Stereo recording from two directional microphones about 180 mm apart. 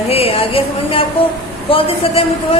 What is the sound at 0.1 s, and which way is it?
Speech, 35° left (ahead or behind).